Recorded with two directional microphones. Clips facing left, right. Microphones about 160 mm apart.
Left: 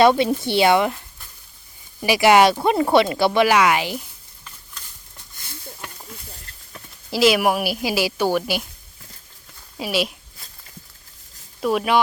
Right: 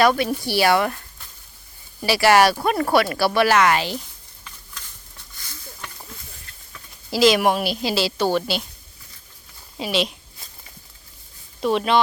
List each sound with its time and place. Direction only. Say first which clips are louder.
0.0 s a woman's voice: left 3 dB; 25° left (ahead or behind)
7.1 s a woman's voice: even; 5° left (ahead or behind)
9.7 s speech: even; 5° left (ahead or behind)
11.6 s a woman's voice: even; 5° left (ahead or behind)